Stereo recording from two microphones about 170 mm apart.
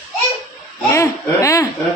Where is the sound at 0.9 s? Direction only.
15° left (ahead or behind).